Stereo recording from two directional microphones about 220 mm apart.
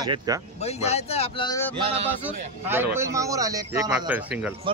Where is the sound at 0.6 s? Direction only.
30° left (ahead or behind).